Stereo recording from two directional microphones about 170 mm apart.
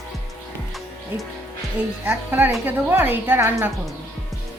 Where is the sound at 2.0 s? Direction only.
10° right (ahead or behind).